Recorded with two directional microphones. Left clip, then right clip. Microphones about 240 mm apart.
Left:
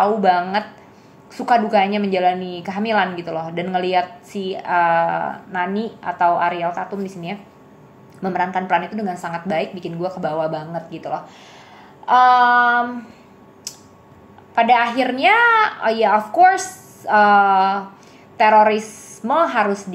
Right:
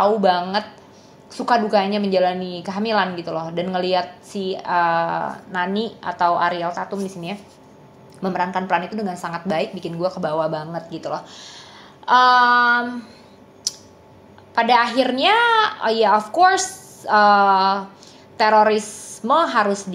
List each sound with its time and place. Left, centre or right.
0.0 s a woman's voice: centre
12.1 s child singing: right
13.7 s a sound: centre
14.5 s a woman's voice: centre